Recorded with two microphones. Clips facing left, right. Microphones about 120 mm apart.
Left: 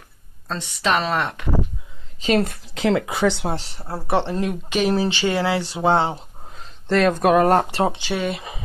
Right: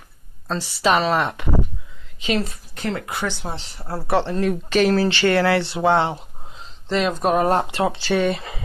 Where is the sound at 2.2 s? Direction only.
50° left (ahead or behind); by 3.6 s 75° left (ahead or behind).